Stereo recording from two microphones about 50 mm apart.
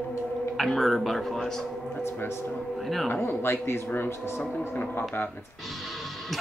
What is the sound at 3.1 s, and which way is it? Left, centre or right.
Speech, left.